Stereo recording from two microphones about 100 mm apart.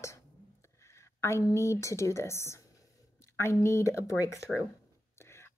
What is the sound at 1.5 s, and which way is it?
A woman's voice, 30° left (ahead or behind).